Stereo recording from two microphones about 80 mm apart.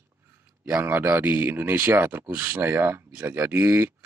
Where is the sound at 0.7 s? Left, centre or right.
Right.